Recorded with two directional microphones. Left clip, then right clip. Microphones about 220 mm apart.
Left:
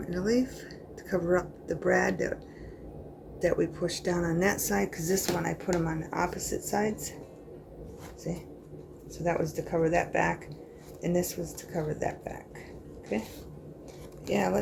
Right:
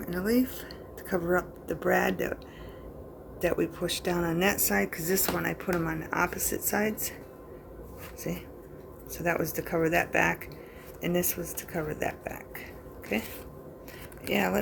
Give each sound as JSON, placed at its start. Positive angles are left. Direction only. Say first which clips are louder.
{"t": 0.0, "sound": "speech", "louder": "even", "side_deg": -15}
{"t": 3.4, "sound": "speech", "louder": "left 1 dB", "side_deg": -15}
{"t": 9.1, "sound": "speech", "louder": "even", "side_deg": -25}